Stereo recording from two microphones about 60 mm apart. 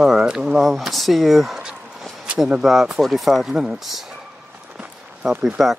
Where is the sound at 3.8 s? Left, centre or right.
Centre.